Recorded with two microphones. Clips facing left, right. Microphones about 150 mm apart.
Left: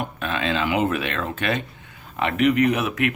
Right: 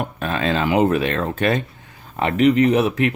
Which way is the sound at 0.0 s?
40° right (ahead or behind).